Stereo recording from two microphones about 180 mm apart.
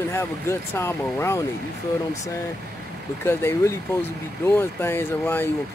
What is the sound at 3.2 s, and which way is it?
Speech, 15° left (ahead or behind).